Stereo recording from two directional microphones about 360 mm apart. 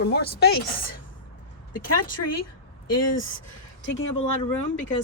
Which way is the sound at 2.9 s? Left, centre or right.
Left.